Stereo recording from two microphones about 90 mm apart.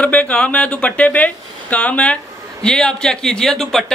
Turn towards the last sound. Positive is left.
turn(degrees=5)  # may be behind; listen again after turning